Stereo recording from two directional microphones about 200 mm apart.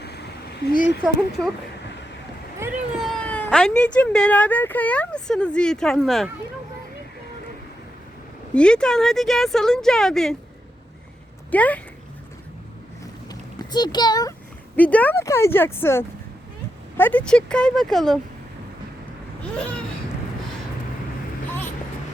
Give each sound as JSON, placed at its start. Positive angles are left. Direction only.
{"t": 0.0, "sound": "a sound", "side_deg": 55}
{"t": 2.6, "sound": "speech", "side_deg": 0}
{"t": 8.5, "sound": "speech", "side_deg": 5}
{"t": 11.5, "sound": "speech", "side_deg": 5}
{"t": 13.6, "sound": "a child's voice", "side_deg": 20}
{"t": 14.8, "sound": "speech", "side_deg": 10}
{"t": 19.4, "sound": "vehicle", "side_deg": 5}